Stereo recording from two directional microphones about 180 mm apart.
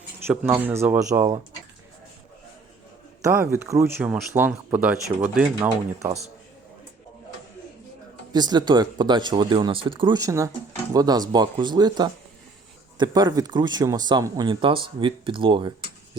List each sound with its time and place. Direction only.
0.3 s speech: 10° right (ahead or behind)
3.2 s speech: 15° right (ahead or behind)
5.5 s speech: 20° right (ahead or behind)
8.3 s speech: 25° right (ahead or behind)